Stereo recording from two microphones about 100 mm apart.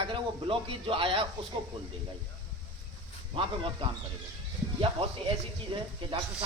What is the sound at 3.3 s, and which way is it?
Speech, 60° right (ahead or behind).